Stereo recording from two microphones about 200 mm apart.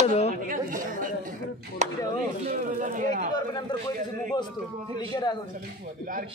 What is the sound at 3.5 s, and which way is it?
Speech, 20° left (ahead or behind).